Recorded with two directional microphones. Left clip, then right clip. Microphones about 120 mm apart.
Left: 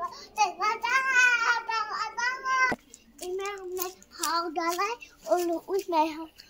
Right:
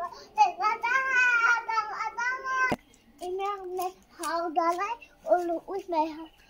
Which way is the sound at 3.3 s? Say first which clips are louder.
Right 2 dB; 10° right (ahead or behind).